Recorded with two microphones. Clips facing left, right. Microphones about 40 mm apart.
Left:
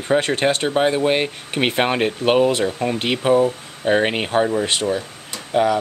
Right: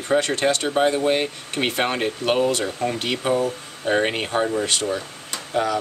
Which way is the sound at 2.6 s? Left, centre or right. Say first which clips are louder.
Left 3 dB; centre.